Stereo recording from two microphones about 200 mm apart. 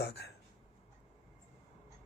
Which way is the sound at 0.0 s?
55° left (ahead or behind).